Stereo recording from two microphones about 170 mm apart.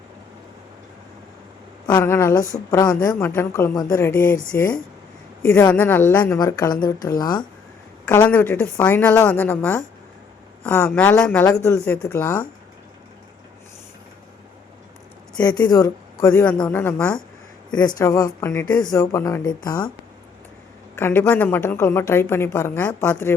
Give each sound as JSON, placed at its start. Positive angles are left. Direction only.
{"t": 1.9, "sound": "a woman's voice", "side_deg": 20}
{"t": 6.4, "sound": "a woman's voice", "side_deg": 25}
{"t": 8.3, "sound": "a woman's voice", "side_deg": 10}
{"t": 15.4, "sound": "speech", "side_deg": 25}
{"t": 16.4, "sound": "a woman's voice", "side_deg": 5}
{"t": 17.7, "sound": "a woman's voice", "side_deg": 25}
{"t": 18.9, "sound": "a woman's voice", "side_deg": 15}
{"t": 20.9, "sound": "a woman's voice", "side_deg": 10}